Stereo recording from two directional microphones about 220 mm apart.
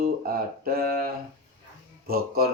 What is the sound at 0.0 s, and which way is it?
Speech, 40° right (ahead or behind).